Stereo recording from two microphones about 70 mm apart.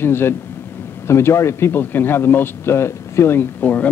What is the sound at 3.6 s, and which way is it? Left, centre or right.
Speech, left.